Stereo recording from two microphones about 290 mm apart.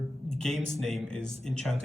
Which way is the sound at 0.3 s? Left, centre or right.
Centre.